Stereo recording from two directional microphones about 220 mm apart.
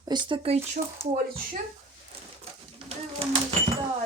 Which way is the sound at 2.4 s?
25° right (ahead or behind).